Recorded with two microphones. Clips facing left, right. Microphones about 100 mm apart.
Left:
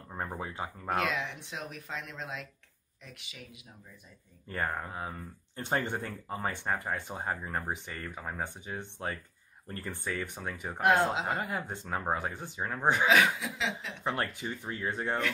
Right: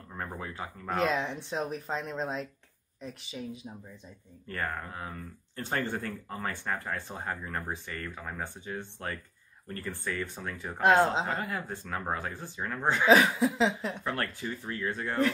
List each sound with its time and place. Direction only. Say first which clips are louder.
0.1 s speech: left 1 dB; 20° left (ahead or behind)
1.0 s speech: right 4 dB; 35° right (ahead or behind)
4.5 s speech: left 1 dB; 20° left (ahead or behind)
10.8 s speech: right 3 dB; 25° right (ahead or behind)
11.4 s speech: even; 20° left (ahead or behind)
13.0 s speech: right 6 dB; 35° right (ahead or behind)
14.0 s speech: left 4 dB; 20° left (ahead or behind)